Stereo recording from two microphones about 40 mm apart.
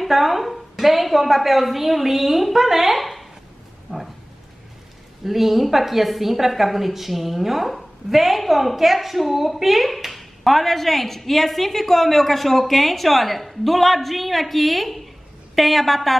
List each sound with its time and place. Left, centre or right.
0.0 s a woman's voice: centre
3.9 s a sound: right
5.2 s a woman's voice: centre